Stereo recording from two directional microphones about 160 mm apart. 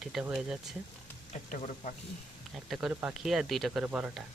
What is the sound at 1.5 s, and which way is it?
Speech, 55° left (ahead or behind).